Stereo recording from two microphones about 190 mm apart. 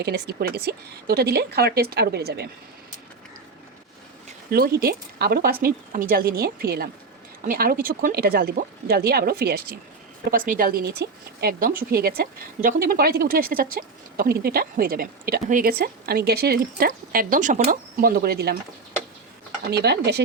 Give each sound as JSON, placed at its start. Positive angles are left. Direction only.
{"t": 0.0, "sound": "a woman's voice", "side_deg": -60}
{"t": 4.5, "sound": "speech", "side_deg": -55}
{"t": 19.7, "sound": "a woman's voice", "side_deg": -60}